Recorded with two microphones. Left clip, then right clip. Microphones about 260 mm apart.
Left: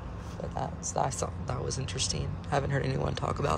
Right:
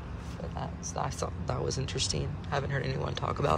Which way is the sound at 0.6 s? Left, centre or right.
Left.